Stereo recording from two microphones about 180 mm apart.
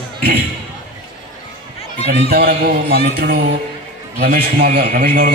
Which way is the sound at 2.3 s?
60° right (ahead or behind).